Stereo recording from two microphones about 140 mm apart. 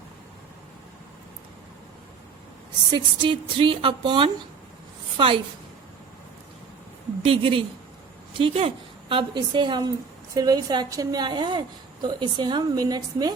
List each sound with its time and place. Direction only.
2.9 s a woman's voice: 40° right (ahead or behind)
7.3 s a woman's voice: 40° right (ahead or behind)